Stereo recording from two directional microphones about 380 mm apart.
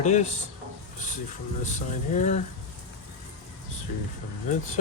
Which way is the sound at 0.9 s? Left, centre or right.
Centre.